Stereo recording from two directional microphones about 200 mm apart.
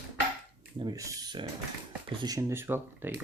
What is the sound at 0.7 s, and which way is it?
Speech, 20° right (ahead or behind).